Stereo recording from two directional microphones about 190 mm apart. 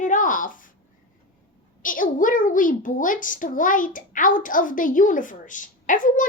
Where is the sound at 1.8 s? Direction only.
45° left (ahead or behind).